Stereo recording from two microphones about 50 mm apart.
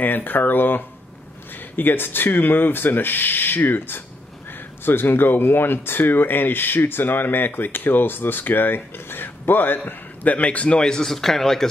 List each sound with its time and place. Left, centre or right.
0.0 s speech: left
10.2 s a man's voice: left; by 11.6 s centre